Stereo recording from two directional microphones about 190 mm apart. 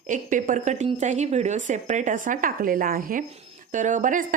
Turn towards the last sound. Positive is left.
turn(degrees=-45)  # may be behind; listen again after turning